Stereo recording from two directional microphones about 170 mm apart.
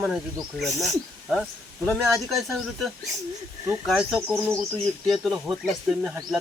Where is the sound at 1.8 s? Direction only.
5° left (ahead or behind).